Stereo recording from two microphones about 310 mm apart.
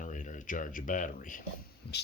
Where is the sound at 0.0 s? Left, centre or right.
Left.